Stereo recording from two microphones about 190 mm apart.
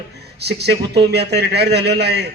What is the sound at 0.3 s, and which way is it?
A man's voice, 60° right (ahead or behind).